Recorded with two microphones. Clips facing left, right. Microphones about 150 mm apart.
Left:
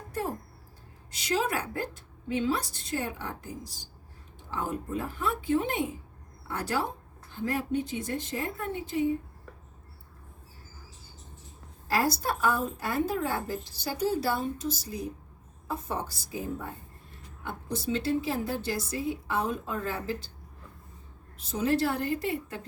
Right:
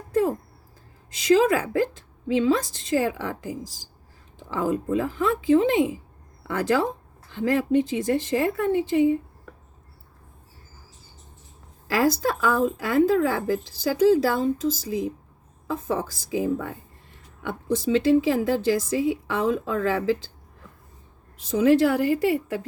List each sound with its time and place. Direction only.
1.2 s a woman's voice: 90° right
11.9 s a woman's voice: 90° right
21.7 s a woman's voice: 90° right